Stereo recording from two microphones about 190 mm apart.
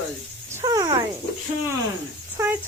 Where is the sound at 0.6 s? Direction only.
20° right (ahead or behind).